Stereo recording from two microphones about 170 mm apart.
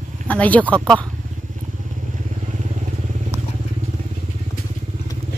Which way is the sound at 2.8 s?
45° right (ahead or behind).